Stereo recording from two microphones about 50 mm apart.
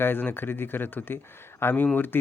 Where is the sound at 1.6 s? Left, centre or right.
Left.